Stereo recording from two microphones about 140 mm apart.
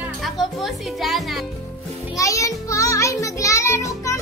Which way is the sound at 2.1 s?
25° left (ahead or behind).